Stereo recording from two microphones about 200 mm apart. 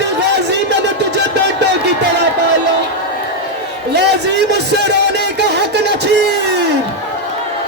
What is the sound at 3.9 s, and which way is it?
Speech, 60° right (ahead or behind).